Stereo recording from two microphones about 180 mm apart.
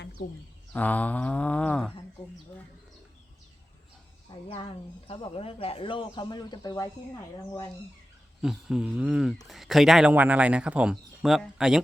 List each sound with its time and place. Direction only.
0.7 s a sound: 10° left (ahead or behind)
4.4 s speech: 30° left (ahead or behind)
8.4 s speech: centre (ahead or behind)